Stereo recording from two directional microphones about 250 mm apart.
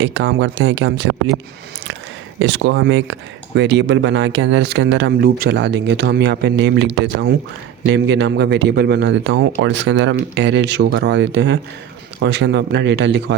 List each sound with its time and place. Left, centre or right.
0.0 s speech: right
2.4 s speech: right